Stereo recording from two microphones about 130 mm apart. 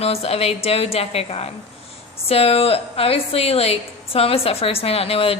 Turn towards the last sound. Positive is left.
turn(degrees=50)  # may be behind; listen again after turning